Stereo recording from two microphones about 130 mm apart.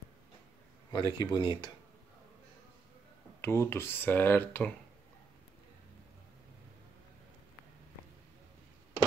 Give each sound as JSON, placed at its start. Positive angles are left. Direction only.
{"t": 0.9, "sound": "speech", "side_deg": 35}
{"t": 3.3, "sound": "speech", "side_deg": 20}